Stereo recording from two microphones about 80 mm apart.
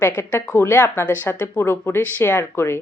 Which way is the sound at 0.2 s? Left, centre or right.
Left.